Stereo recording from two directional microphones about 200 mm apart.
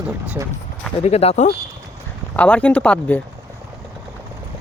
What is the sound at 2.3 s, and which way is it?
Speech, 5° left (ahead or behind).